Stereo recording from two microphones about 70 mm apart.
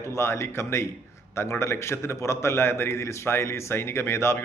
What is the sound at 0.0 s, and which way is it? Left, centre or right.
Speech, left.